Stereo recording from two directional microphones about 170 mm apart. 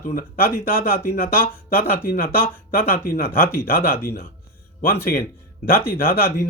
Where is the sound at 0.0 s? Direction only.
60° left (ahead or behind).